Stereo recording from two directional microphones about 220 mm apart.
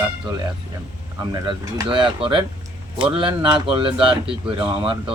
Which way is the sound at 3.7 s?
25° right (ahead or behind).